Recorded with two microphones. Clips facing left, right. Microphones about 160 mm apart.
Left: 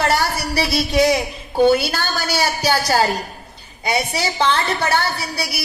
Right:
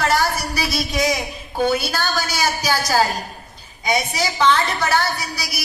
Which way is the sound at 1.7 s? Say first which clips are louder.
Left 1 dB; 60° left (ahead or behind).